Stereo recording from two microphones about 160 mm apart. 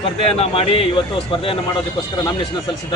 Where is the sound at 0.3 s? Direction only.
40° left (ahead or behind).